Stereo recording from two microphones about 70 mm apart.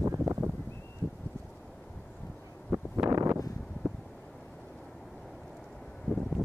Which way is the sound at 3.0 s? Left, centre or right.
Centre.